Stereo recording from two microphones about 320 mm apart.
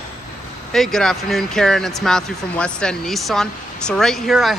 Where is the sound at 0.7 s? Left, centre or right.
Centre.